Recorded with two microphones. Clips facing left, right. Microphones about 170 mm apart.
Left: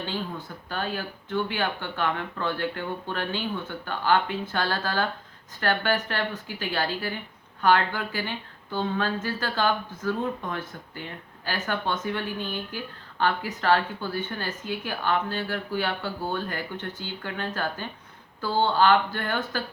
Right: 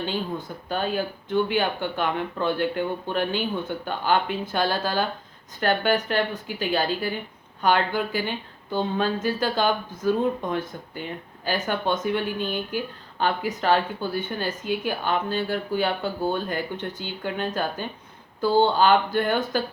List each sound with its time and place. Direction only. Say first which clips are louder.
0.0 s speech: right 4 dB; 15° right (ahead or behind)